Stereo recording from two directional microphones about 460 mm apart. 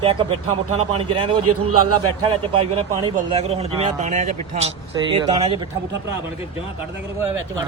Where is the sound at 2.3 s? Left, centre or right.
Centre.